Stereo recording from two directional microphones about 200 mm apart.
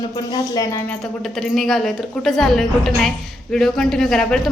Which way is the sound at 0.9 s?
Centre (ahead or behind).